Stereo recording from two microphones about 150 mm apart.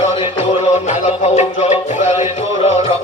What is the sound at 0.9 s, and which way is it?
Music, 50° left (ahead or behind).